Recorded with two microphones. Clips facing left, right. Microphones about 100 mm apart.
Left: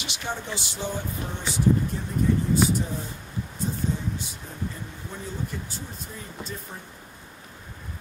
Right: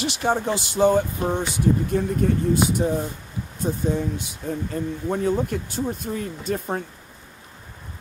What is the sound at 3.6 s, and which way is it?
Speech, 60° right (ahead or behind).